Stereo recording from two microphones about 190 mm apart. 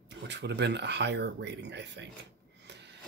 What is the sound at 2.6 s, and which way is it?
Printer, 65° right (ahead or behind).